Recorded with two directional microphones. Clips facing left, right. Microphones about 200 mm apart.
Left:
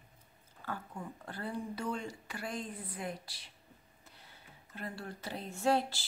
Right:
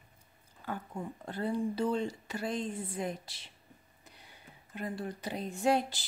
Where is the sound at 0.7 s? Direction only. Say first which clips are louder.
Right 4 dB; 20° right (ahead or behind).